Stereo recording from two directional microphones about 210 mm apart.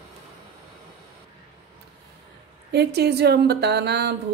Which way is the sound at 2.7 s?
50° right (ahead or behind).